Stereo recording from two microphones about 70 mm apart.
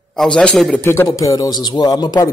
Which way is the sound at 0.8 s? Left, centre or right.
Left.